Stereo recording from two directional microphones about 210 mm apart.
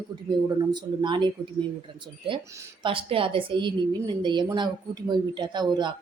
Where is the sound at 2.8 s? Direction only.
25° right (ahead or behind).